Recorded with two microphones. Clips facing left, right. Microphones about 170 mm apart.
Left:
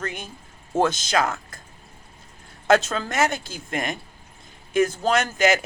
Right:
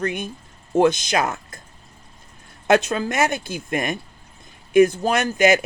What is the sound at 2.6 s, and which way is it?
Speech, 15° right (ahead or behind).